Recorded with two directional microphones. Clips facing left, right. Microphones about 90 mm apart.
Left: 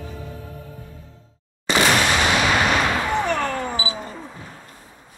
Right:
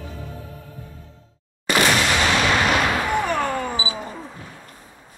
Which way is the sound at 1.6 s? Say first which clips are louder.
Left 1 dB; 15° left (ahead or behind).